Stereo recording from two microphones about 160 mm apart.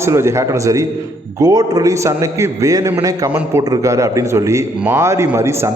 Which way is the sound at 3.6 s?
20° right (ahead or behind).